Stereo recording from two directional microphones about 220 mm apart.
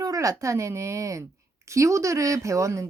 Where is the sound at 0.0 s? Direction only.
15° right (ahead or behind).